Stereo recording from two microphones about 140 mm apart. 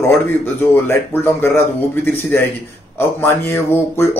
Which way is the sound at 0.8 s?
20° left (ahead or behind).